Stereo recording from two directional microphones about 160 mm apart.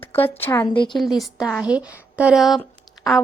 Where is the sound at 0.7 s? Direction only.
30° left (ahead or behind).